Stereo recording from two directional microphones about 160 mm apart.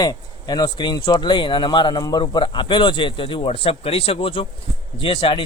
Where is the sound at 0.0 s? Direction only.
25° left (ahead or behind).